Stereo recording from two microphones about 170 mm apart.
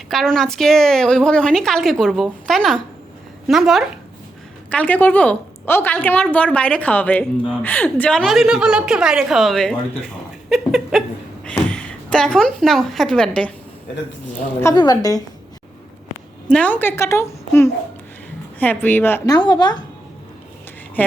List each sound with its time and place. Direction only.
0.1 s a woman's voice: centre (ahead or behind)
14.6 s a woman's voice: 20° left (ahead or behind)
16.5 s a woman's voice: 10° left (ahead or behind); by 19.8 s 25° left (ahead or behind)